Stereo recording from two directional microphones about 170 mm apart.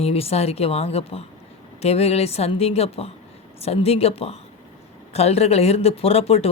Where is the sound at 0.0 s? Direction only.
35° left (ahead or behind).